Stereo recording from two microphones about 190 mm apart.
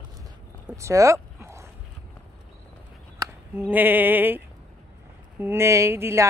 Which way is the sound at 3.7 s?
10° right (ahead or behind).